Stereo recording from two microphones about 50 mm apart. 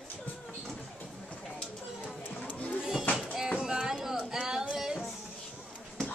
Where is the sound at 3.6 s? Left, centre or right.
Centre.